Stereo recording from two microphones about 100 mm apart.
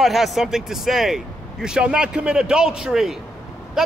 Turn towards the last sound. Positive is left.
turn(degrees=-5)  # may be behind; listen again after turning